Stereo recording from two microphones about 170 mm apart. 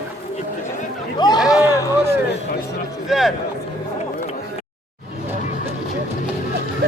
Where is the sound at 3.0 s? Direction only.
Centre (ahead or behind).